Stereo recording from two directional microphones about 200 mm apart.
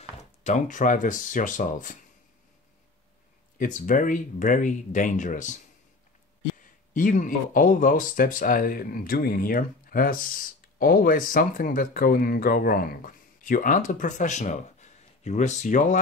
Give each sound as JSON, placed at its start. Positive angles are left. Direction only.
{"t": 0.4, "sound": "speech", "side_deg": 35}
{"t": 3.5, "sound": "speech", "side_deg": 40}
{"t": 6.9, "sound": "speech", "side_deg": 40}